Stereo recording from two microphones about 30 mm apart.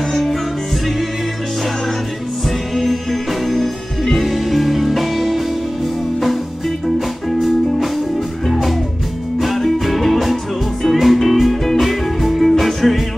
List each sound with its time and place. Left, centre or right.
0.1 s music: centre
2.7 s music: centre
7.2 s music: centre